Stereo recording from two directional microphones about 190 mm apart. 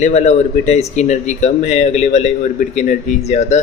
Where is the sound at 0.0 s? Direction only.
40° left (ahead or behind).